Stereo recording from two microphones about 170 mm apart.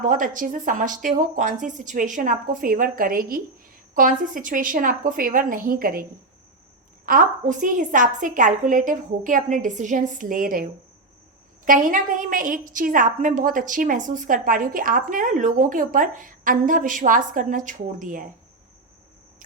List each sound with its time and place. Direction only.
0.0 s a woman's voice: 50° right (ahead or behind)